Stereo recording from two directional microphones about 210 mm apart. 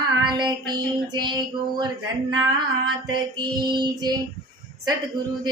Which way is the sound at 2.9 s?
20° right (ahead or behind).